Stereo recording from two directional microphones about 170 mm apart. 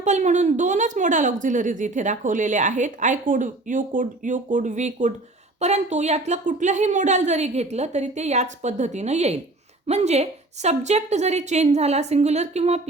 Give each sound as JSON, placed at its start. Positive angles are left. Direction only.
{"t": 0.0, "sound": "a woman's voice", "side_deg": -45}